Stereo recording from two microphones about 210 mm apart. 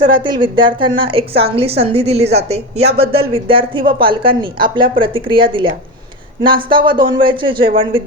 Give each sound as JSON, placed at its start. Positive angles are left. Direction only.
{"t": 0.0, "sound": "a woman's voice", "side_deg": -25}